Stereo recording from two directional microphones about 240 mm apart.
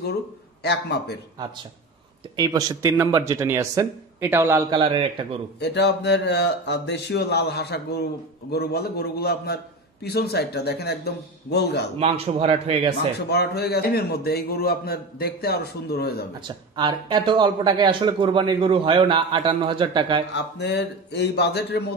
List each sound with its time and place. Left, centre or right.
0.7 s speech: left
2.3 s a man's voice: centre
5.6 s a man's voice: left
12.0 s speech: right
13.3 s a man's voice: left
16.4 s speech: centre
20.3 s speech: left